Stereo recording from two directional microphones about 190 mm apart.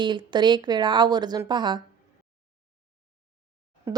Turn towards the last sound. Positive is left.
turn(degrees=-15)  # may be behind; listen again after turning